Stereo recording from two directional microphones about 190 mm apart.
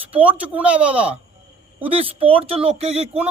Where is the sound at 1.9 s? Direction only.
30° right (ahead or behind).